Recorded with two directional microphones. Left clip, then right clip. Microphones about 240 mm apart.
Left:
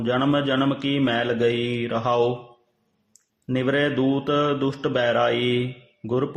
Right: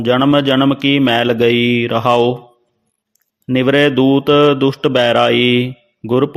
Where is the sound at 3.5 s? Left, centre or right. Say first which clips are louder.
Right 10 dB; right.